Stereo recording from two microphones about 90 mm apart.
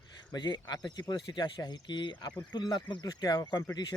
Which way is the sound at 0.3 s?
55° left (ahead or behind).